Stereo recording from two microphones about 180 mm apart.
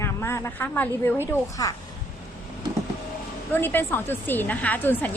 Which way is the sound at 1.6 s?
20° left (ahead or behind).